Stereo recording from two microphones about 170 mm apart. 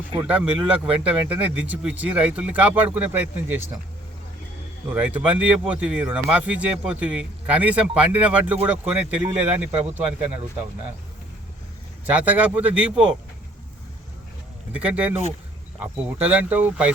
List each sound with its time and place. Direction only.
0.2 s speech: 10° right (ahead or behind)
4.9 s speech: 10° right (ahead or behind)
12.0 s speech: 10° right (ahead or behind)
14.7 s speech: 5° right (ahead or behind)